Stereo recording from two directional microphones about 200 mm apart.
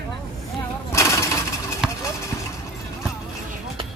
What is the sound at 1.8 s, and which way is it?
Vehicle, centre (ahead or behind).